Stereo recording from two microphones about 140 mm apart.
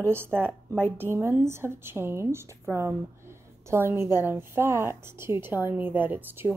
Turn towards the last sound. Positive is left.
turn(degrees=-15)  # may be behind; listen again after turning